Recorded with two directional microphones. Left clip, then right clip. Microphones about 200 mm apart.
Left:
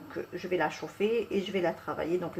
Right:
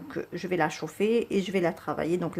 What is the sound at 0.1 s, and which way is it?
Speech, 45° right (ahead or behind).